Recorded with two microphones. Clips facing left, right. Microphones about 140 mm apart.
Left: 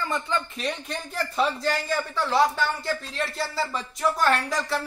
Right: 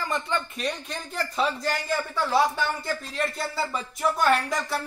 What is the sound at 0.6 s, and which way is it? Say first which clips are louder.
Speech: left 1 dB; centre (ahead or behind).